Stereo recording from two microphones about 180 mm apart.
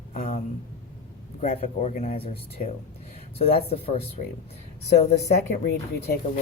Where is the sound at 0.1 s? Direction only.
45° left (ahead or behind).